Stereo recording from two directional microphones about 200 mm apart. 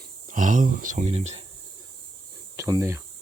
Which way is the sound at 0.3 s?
40° right (ahead or behind).